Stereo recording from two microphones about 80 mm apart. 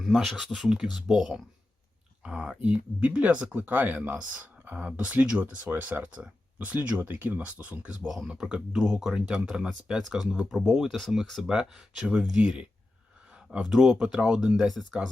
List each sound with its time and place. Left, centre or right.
0.0 s speech: centre
5.6 s speech: right
6.0 s speech: centre
8.0 s speech: centre
13.7 s speech: centre